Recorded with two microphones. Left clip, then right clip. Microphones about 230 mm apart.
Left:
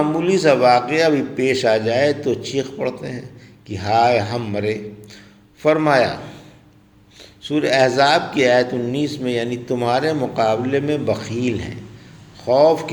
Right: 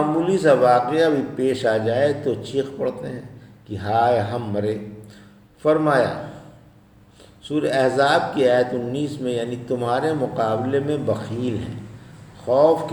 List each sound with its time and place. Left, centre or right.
0.2 s speech: left
7.4 s speech: left